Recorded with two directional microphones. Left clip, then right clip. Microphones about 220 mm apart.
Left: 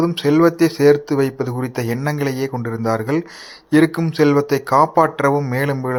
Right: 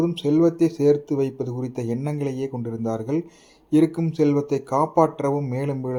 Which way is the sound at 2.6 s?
5° left (ahead or behind).